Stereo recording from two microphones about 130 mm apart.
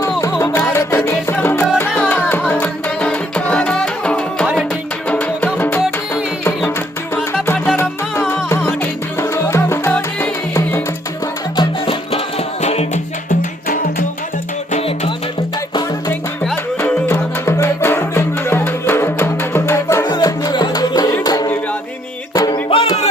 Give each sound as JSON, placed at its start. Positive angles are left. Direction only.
{"t": 0.2, "sound": "music", "side_deg": 25}
{"t": 7.4, "sound": "music", "side_deg": 15}
{"t": 9.9, "sound": "music", "side_deg": 10}
{"t": 11.5, "sound": "music", "side_deg": 40}
{"t": 14.7, "sound": "music", "side_deg": 50}
{"t": 15.7, "sound": "music", "side_deg": 30}
{"t": 17.1, "sound": "music", "side_deg": 20}
{"t": 20.1, "sound": "music", "side_deg": 30}
{"t": 22.7, "sound": "music", "side_deg": 45}